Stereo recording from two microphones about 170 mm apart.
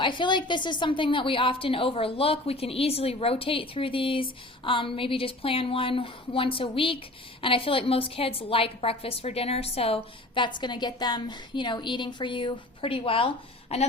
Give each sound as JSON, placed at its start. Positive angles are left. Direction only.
{"t": 0.0, "sound": "a woman's voice", "side_deg": 30}